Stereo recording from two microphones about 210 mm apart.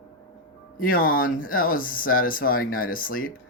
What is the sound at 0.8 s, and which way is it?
Speech, 40° left (ahead or behind).